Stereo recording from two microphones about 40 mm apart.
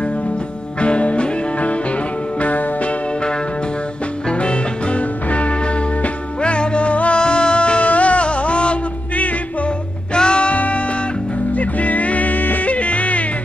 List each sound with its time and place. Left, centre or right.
0.7 s music: left
4.3 s music: left
11.5 s music: left